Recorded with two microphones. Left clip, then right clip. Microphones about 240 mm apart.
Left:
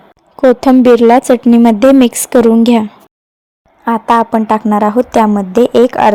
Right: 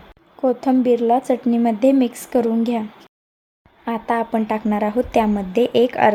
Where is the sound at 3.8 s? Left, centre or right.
Left.